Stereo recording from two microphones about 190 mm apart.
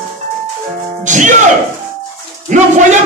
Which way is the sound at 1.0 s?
40° right (ahead or behind).